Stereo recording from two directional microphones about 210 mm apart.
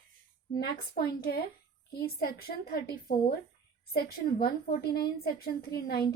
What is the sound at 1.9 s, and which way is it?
Speech, 45° left (ahead or behind).